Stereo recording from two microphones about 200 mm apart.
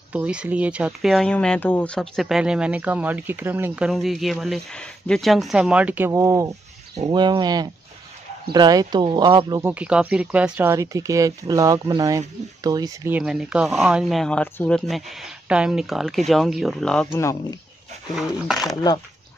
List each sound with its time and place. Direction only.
0.1 s speech: 5° right (ahead or behind); by 9.6 s 20° right (ahead or behind)
9.6 s speech: 10° right (ahead or behind)
13.2 s speech: 5° right (ahead or behind); by 17.6 s 15° left (ahead or behind)
18.1 s speech: centre (ahead or behind)